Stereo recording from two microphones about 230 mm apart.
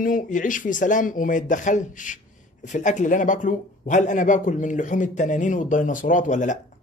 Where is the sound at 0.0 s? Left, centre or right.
Left.